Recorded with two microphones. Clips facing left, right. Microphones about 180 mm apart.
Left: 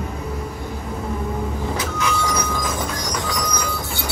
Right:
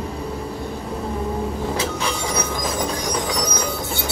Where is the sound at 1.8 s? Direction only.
30° right (ahead or behind).